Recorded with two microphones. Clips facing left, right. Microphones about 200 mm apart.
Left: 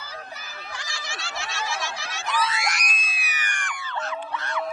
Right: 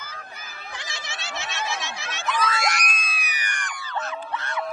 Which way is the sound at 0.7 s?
20° right (ahead or behind).